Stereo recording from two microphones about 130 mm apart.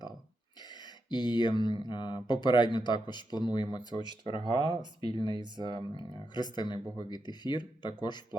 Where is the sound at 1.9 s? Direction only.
35° left (ahead or behind).